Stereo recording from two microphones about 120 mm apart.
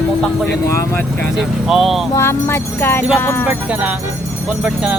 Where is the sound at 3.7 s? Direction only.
10° right (ahead or behind).